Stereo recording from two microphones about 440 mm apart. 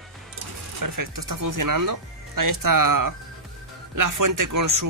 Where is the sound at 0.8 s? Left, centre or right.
Right.